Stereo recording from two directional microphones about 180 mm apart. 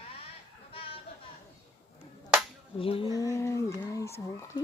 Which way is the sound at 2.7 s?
30° left (ahead or behind).